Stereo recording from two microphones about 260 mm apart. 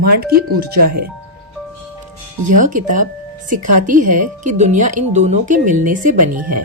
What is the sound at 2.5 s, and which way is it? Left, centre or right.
Speech, right.